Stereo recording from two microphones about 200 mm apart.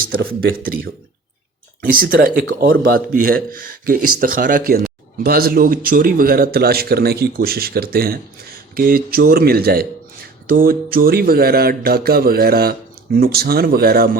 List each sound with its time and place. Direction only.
0.0 s speech: 45° right (ahead or behind)